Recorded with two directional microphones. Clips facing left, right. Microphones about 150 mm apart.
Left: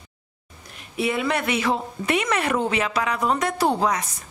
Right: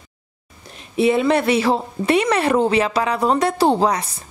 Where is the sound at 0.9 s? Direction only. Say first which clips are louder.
Right 8 dB; 30° right (ahead or behind).